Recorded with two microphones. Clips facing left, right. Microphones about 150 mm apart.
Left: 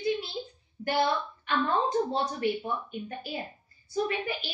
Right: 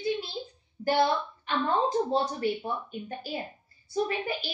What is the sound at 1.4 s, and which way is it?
Speech, 30° right (ahead or behind).